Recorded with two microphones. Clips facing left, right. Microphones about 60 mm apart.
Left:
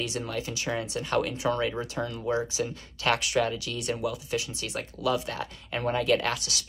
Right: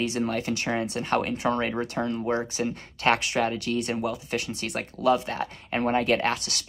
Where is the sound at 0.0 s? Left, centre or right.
Right.